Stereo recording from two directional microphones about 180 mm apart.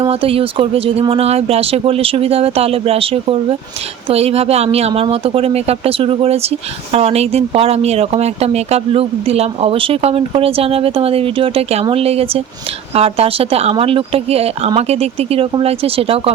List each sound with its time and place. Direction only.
0.0 s speech: 30° right (ahead or behind)